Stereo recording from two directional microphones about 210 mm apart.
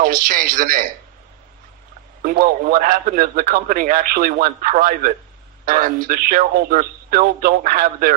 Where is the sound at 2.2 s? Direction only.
40° right (ahead or behind).